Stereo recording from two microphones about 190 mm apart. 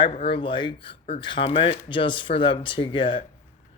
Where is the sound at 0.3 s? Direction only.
25° left (ahead or behind).